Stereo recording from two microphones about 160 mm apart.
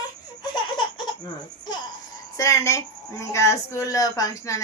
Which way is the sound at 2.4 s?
20° left (ahead or behind).